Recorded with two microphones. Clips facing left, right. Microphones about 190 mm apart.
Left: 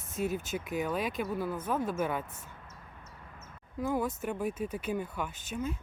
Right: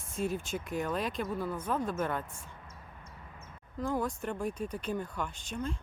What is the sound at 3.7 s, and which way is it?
Speech, 5° left (ahead or behind).